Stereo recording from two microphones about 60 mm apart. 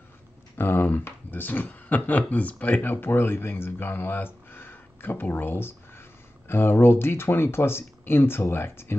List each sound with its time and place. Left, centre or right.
0.6 s speech: left